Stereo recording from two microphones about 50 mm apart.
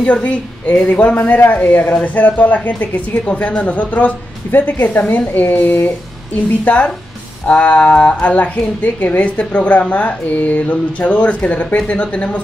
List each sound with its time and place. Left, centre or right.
0.0 s a woman's voice: left
6.6 s speech: left